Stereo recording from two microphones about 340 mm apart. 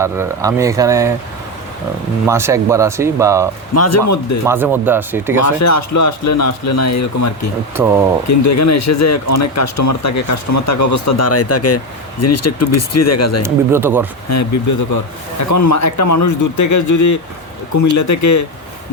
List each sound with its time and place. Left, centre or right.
0.0 s speech: centre
2.2 s speech: centre
3.8 s speech: left
4.4 s speech: centre
5.5 s speech: left
7.8 s speech: centre
8.3 s speech: left
13.4 s speech: centre
14.3 s speech: left